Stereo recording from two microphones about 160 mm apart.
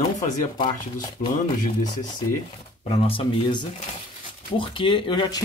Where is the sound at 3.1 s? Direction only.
30° left (ahead or behind).